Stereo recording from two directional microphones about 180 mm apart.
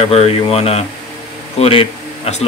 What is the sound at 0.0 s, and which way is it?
A man's voice, 35° left (ahead or behind).